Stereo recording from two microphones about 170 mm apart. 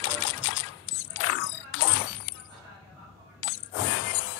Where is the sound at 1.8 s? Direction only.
90° left.